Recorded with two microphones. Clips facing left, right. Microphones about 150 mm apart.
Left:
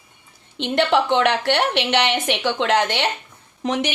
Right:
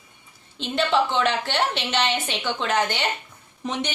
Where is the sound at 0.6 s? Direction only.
70° left (ahead or behind).